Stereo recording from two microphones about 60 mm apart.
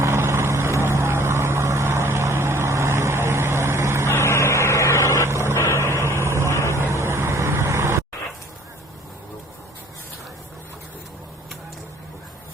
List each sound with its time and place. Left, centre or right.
0.0 s vehicle: right
4.1 s vehicle: left
5.3 s vehicle: right
5.5 s vehicle: left
6.1 s vehicle: right